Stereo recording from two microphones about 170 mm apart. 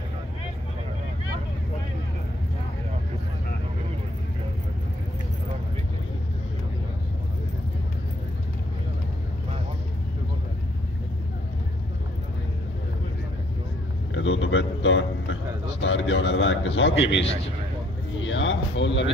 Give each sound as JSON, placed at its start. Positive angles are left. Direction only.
{"t": 14.1, "sound": "a sound", "side_deg": 90}
{"t": 15.8, "sound": "a man's voice", "side_deg": 90}
{"t": 18.2, "sound": "a man's voice", "side_deg": 90}